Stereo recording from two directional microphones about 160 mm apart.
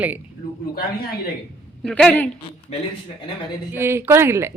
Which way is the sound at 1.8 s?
5° left (ahead or behind).